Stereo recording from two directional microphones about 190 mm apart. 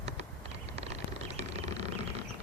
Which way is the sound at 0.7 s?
35° right (ahead or behind).